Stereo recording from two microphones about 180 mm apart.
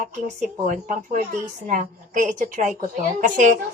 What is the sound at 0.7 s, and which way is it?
A woman's voice, 45° right (ahead or behind).